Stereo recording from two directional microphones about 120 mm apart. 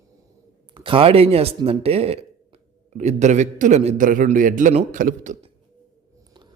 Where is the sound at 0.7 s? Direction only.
45° right (ahead or behind); by 5.5 s 90° right.